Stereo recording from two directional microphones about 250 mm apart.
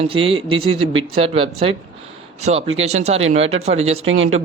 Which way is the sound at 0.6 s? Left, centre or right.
Right.